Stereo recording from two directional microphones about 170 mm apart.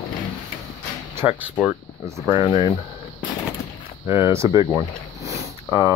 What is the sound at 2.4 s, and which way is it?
Speech, 35° left (ahead or behind).